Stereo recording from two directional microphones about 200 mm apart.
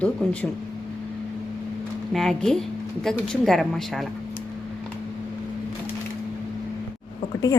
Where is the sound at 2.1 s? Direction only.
Centre (ahead or behind).